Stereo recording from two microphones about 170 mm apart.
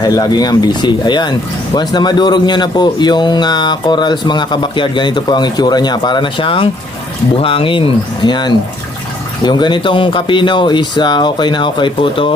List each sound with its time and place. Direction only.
0.0 s speech: 25° left (ahead or behind)